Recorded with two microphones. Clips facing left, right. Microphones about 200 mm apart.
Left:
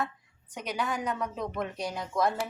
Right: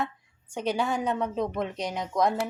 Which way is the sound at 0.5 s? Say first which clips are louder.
Right 5 dB; 30° right (ahead or behind).